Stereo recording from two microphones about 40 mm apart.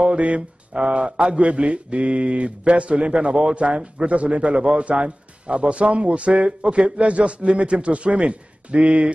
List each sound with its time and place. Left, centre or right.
0.0 s speech: right